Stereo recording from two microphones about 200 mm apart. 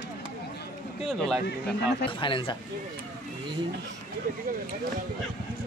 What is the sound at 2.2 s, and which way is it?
Speech, 25° left (ahead or behind).